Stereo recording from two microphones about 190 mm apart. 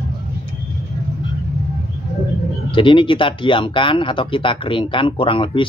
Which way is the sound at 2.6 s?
25° left (ahead or behind).